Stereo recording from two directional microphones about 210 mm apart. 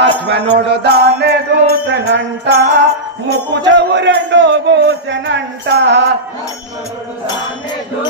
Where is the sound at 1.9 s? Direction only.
55° right (ahead or behind).